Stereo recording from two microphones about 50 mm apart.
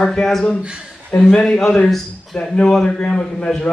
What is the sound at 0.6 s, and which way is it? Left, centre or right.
Speech, centre.